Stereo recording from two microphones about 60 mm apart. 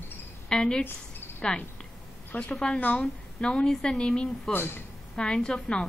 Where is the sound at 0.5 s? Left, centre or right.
Centre.